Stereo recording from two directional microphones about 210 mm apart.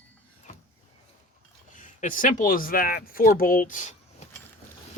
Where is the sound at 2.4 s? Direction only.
40° left (ahead or behind).